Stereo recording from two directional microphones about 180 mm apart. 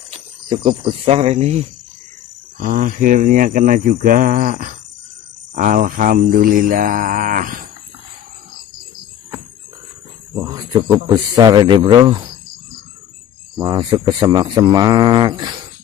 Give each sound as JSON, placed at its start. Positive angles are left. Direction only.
{"t": 0.5, "sound": "speech", "side_deg": -30}
{"t": 2.5, "sound": "speech", "side_deg": -50}
{"t": 10.3, "sound": "a man's voice", "side_deg": -20}
{"t": 13.6, "sound": "a man's voice", "side_deg": -25}